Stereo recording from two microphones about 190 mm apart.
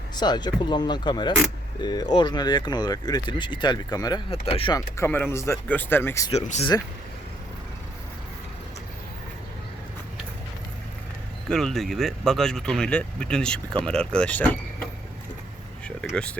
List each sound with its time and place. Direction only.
0.2 s speech: 20° left (ahead or behind)
4.3 s speech: 30° left (ahead or behind)
4.9 s speech: 10° left (ahead or behind)
6.3 s speech: 35° left (ahead or behind)
11.4 s speech: centre (ahead or behind)
16.1 s speech: 5° left (ahead or behind)